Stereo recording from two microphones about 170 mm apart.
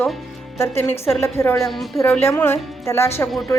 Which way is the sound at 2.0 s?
15° left (ahead or behind).